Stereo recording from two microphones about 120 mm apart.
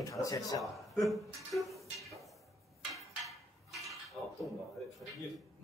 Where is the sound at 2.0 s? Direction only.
Centre (ahead or behind).